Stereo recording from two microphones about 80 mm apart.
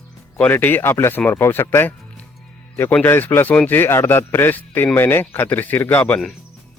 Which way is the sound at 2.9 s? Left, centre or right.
Left.